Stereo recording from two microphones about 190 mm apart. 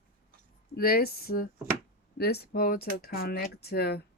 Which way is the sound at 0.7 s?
55° left (ahead or behind).